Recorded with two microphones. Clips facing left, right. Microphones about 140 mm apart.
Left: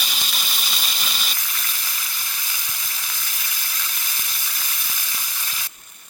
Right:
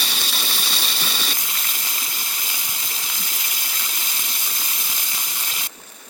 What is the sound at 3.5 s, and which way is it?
Steam, 25° right (ahead or behind).